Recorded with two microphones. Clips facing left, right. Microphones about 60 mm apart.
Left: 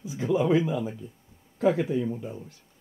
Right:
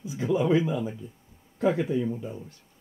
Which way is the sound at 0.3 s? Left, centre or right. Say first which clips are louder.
Even; centre.